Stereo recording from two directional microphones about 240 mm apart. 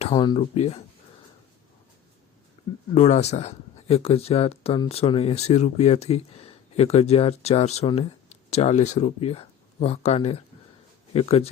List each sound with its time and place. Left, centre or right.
0.0 s speech: centre
2.9 s speech: left